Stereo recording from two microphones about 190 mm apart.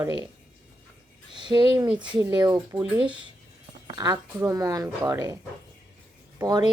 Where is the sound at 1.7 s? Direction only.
15° right (ahead or behind).